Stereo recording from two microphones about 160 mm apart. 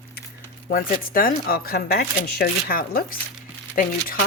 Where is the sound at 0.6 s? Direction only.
65° left (ahead or behind).